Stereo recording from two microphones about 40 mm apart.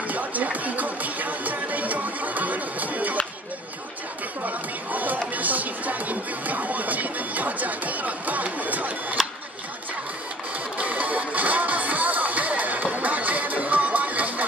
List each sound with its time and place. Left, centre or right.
0.1 s music: right
4.4 s music: right
10.8 s music: right